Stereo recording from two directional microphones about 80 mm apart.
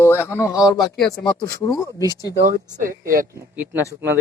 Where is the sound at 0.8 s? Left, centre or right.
Centre.